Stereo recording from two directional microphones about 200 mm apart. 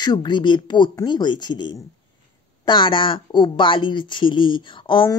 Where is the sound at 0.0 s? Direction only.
20° left (ahead or behind).